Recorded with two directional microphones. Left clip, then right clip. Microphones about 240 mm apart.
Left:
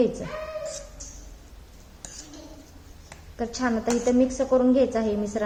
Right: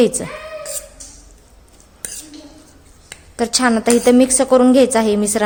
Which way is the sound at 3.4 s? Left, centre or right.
Right.